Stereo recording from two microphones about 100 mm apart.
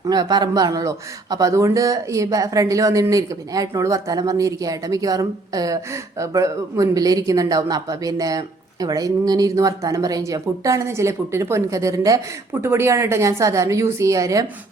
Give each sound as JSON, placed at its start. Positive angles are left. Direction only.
{"t": 0.0, "sound": "a man's voice", "side_deg": -45}